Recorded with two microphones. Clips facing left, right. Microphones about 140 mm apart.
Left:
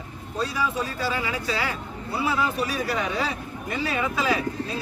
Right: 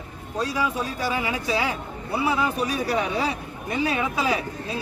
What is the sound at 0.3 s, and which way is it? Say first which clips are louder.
A man's voice: right 1 dB; 15° right (ahead or behind).